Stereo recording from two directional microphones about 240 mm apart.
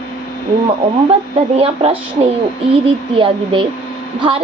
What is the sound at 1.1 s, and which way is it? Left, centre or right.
Speech, right.